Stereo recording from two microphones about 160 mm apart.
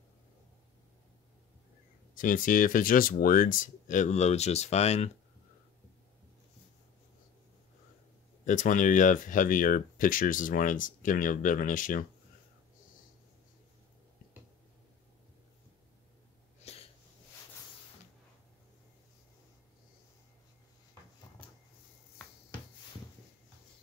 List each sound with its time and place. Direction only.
2.1 s speech: 55° left (ahead or behind)
8.5 s speech: 50° left (ahead or behind)
16.6 s sneeze: 40° left (ahead or behind)